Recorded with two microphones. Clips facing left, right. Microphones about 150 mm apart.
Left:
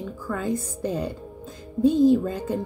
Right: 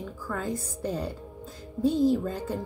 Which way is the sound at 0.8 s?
15° left (ahead or behind).